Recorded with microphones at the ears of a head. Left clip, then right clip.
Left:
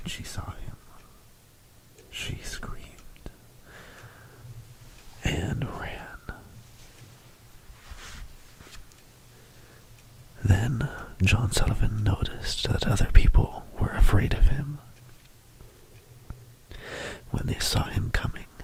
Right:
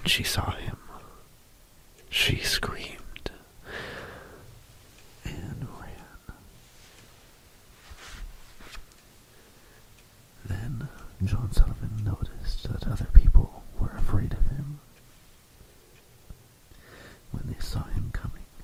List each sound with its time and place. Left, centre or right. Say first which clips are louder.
0.0 s whispering: right 13 dB; right
2.0 s whispering: right 12 dB; right
5.2 s whispering: left 11 dB; left
10.4 s speech: left 11 dB; left
16.7 s whispering: left 13 dB; left